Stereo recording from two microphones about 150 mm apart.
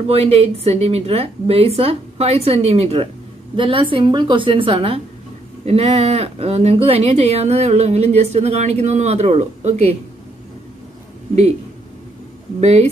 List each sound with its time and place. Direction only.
0.1 s a woman's voice: 40° right (ahead or behind)
12.5 s speech: 45° right (ahead or behind)